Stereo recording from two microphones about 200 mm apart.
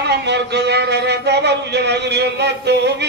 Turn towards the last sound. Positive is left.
turn(degrees=-55)  # may be behind; listen again after turning